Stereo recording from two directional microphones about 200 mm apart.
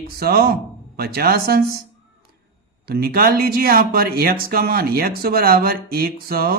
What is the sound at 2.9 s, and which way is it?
Speech, 50° right (ahead or behind).